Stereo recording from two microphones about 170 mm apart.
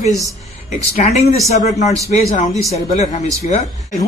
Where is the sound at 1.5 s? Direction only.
45° left (ahead or behind).